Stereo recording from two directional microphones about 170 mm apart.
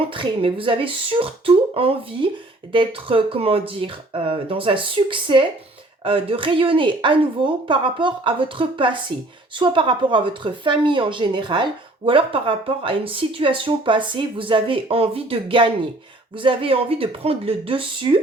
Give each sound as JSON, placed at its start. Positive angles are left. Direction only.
{"t": 0.1, "sound": "a woman's voice", "side_deg": -30}